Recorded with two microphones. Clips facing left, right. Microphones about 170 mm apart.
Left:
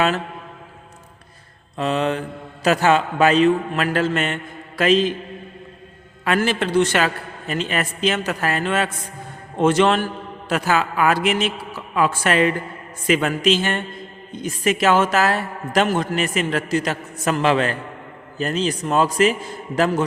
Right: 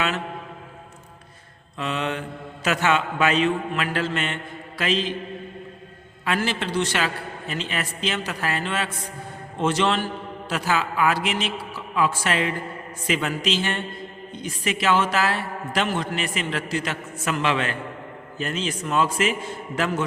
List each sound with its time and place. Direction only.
1.8 s a man's voice: 35° left (ahead or behind)
6.2 s a man's voice: 50° left (ahead or behind)